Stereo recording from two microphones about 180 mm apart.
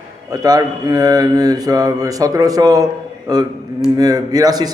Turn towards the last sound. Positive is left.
turn(degrees=-20)  # may be behind; listen again after turning